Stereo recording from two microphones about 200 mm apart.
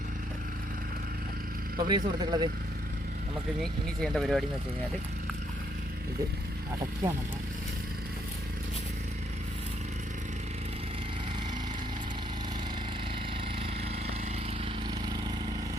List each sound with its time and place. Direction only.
1.8 s speech: 20° right (ahead or behind)
3.6 s speech: 5° left (ahead or behind)
14.6 s vehicle: 20° right (ahead or behind)